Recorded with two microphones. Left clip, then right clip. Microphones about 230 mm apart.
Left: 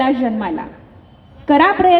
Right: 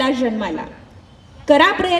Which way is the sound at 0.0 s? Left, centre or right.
Right.